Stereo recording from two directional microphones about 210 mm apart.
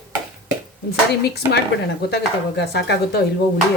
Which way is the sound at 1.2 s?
50° left (ahead or behind).